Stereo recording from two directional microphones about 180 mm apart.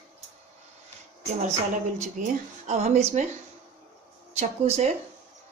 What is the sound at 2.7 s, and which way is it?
Speech, 40° right (ahead or behind).